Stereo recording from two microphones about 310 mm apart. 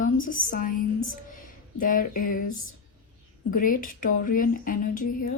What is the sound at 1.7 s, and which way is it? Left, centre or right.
Speech, left.